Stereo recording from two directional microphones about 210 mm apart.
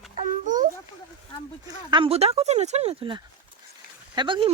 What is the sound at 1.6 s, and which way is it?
Speech, 25° right (ahead or behind).